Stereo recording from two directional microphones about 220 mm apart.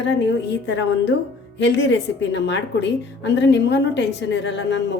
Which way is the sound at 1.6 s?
55° left (ahead or behind).